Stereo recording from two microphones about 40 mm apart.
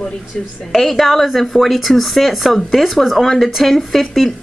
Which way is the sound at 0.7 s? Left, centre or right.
Centre.